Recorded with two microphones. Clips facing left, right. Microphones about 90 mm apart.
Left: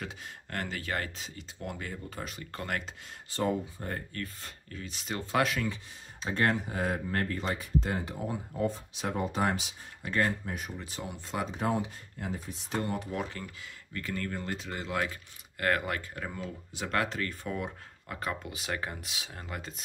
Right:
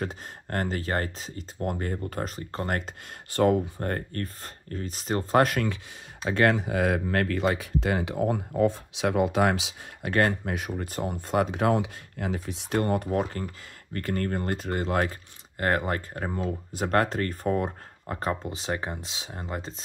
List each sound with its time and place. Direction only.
0.0 s speech: 40° right (ahead or behind)
2.3 s speech: 35° right (ahead or behind)
3.3 s speech: 60° right (ahead or behind)
6.2 s speech: 90° right
10.8 s speech: 50° right (ahead or behind)
15.6 s speech: 35° right (ahead or behind)